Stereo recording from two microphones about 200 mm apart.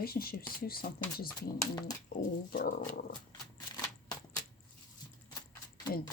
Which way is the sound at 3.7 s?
20° left (ahead or behind).